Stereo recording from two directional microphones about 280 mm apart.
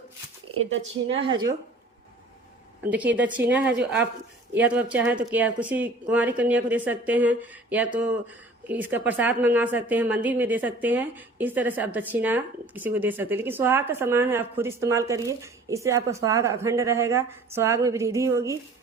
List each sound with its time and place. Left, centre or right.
0.5 s speech: right
0.8 s a woman's voice: centre
2.9 s a woman's voice: centre